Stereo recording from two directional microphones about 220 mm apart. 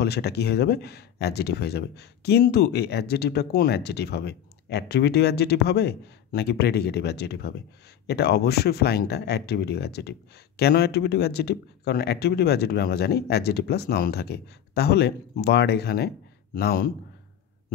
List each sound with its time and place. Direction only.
0.0 s speech: 45° left (ahead or behind)